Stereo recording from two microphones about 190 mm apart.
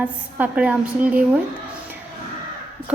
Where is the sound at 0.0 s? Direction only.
5° right (ahead or behind).